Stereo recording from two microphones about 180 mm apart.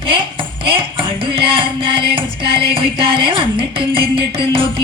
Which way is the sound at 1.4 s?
30° right (ahead or behind).